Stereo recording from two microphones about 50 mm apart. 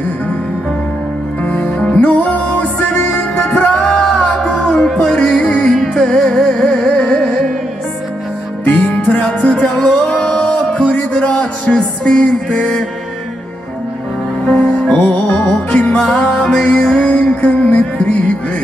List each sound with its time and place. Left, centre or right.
1.4 s music: left
3.8 s music: centre
8.6 s music: left
9.6 s music: centre
10.0 s music: left
14.4 s music: centre